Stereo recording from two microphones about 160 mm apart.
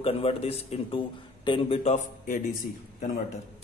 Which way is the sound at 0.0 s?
35° left (ahead or behind).